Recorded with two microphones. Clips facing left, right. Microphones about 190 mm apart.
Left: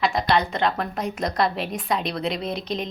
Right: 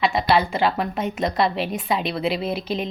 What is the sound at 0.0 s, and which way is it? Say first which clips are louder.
A woman's voice: right 2 dB; 5° right (ahead or behind).